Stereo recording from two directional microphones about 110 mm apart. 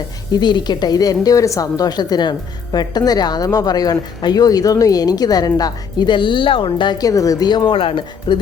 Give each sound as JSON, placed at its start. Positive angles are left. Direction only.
{"t": 0.3, "sound": "a woman's voice", "side_deg": 40}
{"t": 7.1, "sound": "a woman's voice", "side_deg": 30}